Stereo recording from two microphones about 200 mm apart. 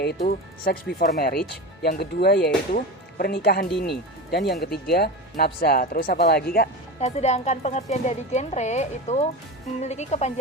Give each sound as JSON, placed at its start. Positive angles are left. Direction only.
{"t": 0.0, "sound": "speech", "side_deg": 50}
{"t": 7.0, "sound": "speech", "side_deg": 35}